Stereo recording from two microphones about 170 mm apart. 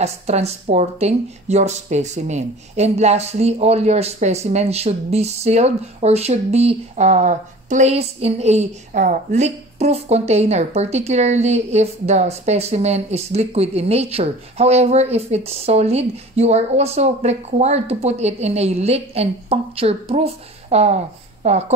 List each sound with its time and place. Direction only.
0.0 s speech: 40° right (ahead or behind)